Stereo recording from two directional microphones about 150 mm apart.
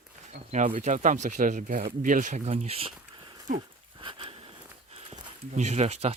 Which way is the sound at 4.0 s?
35° right (ahead or behind).